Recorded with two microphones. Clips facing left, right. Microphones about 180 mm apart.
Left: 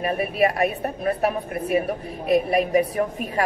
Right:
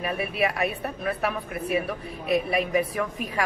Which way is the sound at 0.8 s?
35° left (ahead or behind).